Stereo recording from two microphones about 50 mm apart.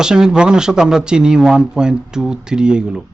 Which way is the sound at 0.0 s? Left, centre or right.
Centre.